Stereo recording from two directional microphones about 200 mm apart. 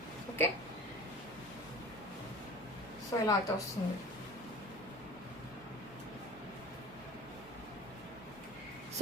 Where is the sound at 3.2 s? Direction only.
15° left (ahead or behind).